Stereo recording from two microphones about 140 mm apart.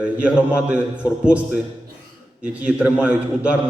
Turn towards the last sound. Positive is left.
turn(degrees=-10)  # may be behind; listen again after turning